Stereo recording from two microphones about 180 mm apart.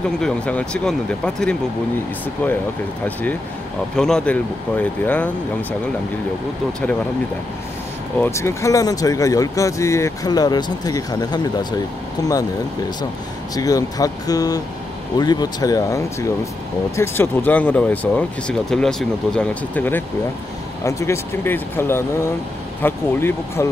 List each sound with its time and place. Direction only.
0.2 s speech: 5° left (ahead or behind)
3.9 s speech: 5° left (ahead or behind)
8.2 s speech: 15° left (ahead or behind)
13.6 s speech: 20° left (ahead or behind)